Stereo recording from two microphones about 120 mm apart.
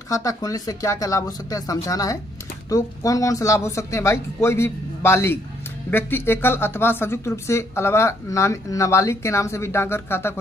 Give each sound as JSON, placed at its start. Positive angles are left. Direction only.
{"t": 0.1, "sound": "speech", "side_deg": 30}